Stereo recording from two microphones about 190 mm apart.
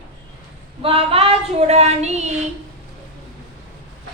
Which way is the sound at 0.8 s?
30° right (ahead or behind).